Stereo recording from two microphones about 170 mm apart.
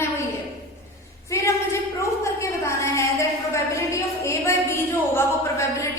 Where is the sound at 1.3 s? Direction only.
15° left (ahead or behind).